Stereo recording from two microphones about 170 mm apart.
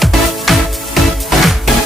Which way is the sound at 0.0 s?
Centre (ahead or behind).